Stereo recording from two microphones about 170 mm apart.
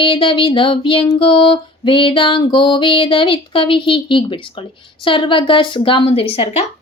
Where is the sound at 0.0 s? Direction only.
30° left (ahead or behind).